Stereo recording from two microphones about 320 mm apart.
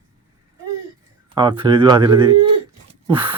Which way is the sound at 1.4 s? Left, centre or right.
Centre.